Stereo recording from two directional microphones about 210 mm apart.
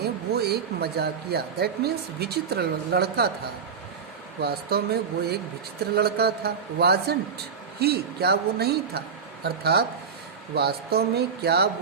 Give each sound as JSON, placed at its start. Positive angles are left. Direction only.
{"t": 0.0, "sound": "a man's voice", "side_deg": -50}
{"t": 4.4, "sound": "a man's voice", "side_deg": -50}